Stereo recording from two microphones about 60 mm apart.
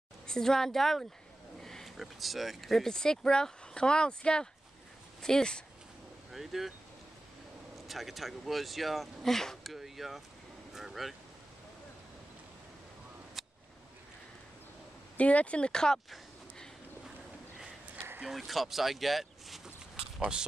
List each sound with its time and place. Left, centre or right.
0.3 s speech: centre
6.3 s speech: centre
7.9 s speech: centre
13.4 s a sound: centre
15.1 s speech: left
18.2 s speech: centre